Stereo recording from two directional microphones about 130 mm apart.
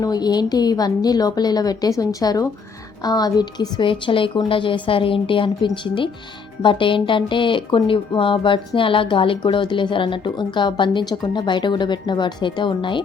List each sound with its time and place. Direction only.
0.0 s a woman's voice: 30° left (ahead or behind)